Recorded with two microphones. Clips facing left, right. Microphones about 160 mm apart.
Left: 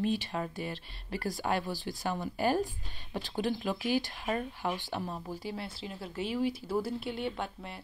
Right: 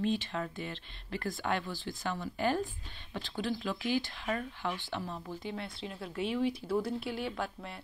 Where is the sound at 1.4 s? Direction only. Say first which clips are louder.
Left 2 dB; 25° left (ahead or behind).